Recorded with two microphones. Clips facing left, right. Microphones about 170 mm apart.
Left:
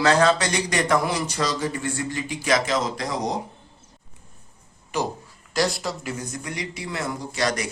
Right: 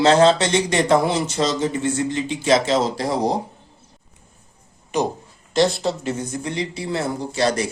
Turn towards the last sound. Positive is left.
turn(degrees=-30)  # may be behind; listen again after turning